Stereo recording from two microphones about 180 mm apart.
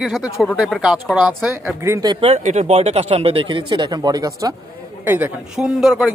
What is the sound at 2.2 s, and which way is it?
A woman's voice, 40° right (ahead or behind).